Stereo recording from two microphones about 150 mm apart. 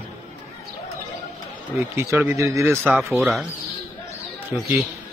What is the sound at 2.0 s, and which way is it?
A man's voice, 15° right (ahead or behind).